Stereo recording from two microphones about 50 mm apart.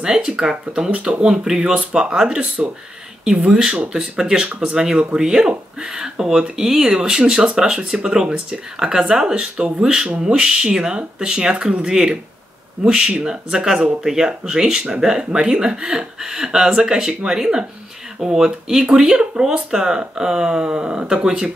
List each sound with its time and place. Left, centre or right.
0.0 s speech: centre